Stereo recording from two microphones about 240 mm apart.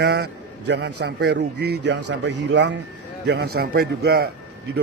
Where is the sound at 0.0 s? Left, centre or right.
Right.